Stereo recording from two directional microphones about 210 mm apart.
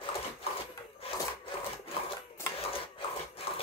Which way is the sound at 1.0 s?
25° left (ahead or behind).